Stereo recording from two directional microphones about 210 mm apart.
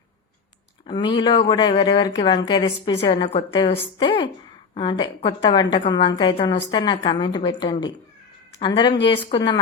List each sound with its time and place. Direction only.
0.9 s a woman's voice: 20° left (ahead or behind)